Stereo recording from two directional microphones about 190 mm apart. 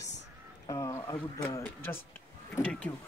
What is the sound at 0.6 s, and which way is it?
Speech, 15° left (ahead or behind).